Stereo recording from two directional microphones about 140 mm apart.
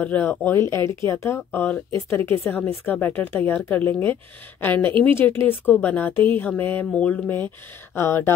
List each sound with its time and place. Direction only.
0.0 s speech: 15° left (ahead or behind)